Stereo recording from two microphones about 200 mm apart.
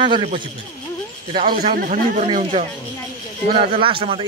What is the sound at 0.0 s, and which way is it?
A man's voice, 25° right (ahead or behind).